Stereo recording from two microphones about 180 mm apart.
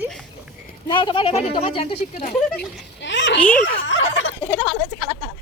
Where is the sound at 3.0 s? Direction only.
80° left.